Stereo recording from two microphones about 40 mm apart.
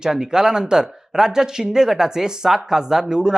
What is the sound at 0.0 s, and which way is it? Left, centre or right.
Speech, centre.